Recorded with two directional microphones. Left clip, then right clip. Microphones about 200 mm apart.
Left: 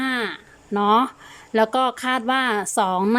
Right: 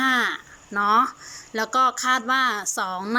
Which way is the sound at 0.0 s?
25° left (ahead or behind).